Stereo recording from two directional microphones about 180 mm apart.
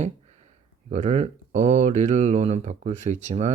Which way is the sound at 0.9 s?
35° right (ahead or behind).